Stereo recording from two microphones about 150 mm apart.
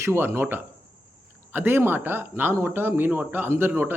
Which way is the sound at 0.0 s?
15° right (ahead or behind).